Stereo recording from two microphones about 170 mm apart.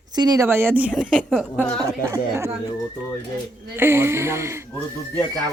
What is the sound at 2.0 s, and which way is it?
Speech, 15° right (ahead or behind).